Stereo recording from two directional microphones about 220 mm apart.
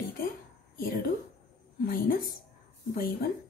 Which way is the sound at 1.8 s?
40° left (ahead or behind).